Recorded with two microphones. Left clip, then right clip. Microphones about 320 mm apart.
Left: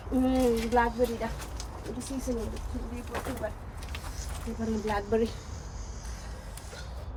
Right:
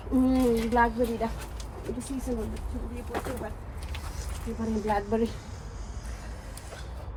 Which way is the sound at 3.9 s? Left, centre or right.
Centre.